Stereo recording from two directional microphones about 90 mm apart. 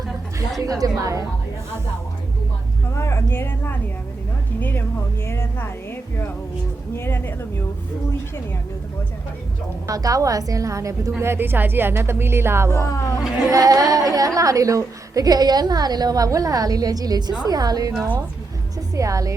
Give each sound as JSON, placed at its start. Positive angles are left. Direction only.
{"t": 0.6, "sound": "a woman's voice", "side_deg": -40}
{"t": 2.9, "sound": "speech", "side_deg": 30}
{"t": 9.8, "sound": "a woman's voice", "side_deg": -40}
{"t": 11.2, "sound": "music", "side_deg": -25}
{"t": 12.7, "sound": "speech", "side_deg": 35}
{"t": 13.5, "sound": "a woman's voice", "side_deg": -40}
{"t": 18.9, "sound": "a woman's voice", "side_deg": -40}